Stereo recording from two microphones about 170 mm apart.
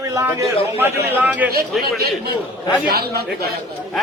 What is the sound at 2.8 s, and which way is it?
Speech, 65° right (ahead or behind).